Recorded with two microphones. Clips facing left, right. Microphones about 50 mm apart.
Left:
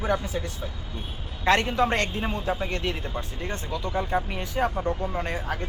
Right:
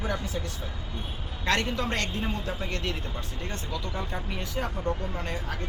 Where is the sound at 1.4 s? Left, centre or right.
Left.